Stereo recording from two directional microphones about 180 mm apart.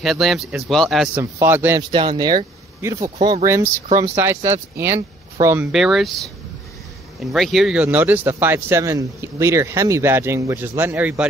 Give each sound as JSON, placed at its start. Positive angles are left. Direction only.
{"t": 0.0, "sound": "speech", "side_deg": 0}
{"t": 1.8, "sound": "speech", "side_deg": -25}
{"t": 3.2, "sound": "speech", "side_deg": -30}
{"t": 3.4, "sound": "speech", "side_deg": -15}
{"t": 5.7, "sound": "speech", "side_deg": 0}